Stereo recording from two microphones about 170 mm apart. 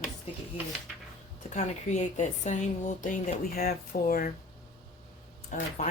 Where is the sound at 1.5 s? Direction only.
45° left (ahead or behind); by 4.3 s 60° left (ahead or behind).